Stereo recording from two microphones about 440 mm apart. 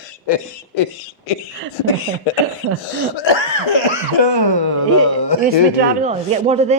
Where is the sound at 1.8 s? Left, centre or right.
Left.